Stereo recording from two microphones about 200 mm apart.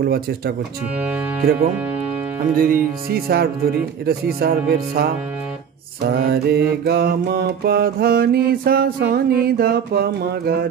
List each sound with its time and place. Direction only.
1.4 s mantra: 50° right (ahead or behind)